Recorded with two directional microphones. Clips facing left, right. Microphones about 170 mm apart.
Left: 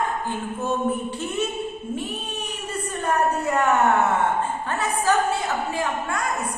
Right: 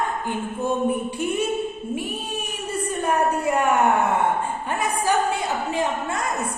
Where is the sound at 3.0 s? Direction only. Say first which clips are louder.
Even; 10° right (ahead or behind).